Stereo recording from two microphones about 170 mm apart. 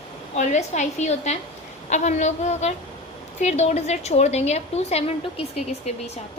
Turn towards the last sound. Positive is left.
turn(degrees=40)  # may be behind; listen again after turning